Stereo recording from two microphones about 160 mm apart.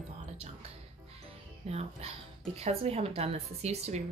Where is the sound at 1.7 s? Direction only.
40° right (ahead or behind).